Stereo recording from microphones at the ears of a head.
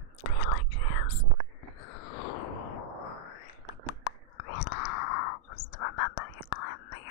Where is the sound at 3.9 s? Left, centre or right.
Left.